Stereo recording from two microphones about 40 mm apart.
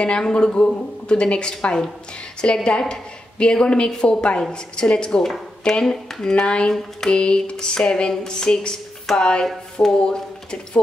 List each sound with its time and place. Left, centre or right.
0.0 s a woman's voice: left
6.4 s a woman's voice: left
9.4 s speech: centre